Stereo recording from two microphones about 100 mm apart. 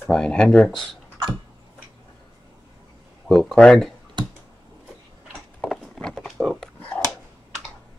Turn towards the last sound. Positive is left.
turn(degrees=15)  # may be behind; listen again after turning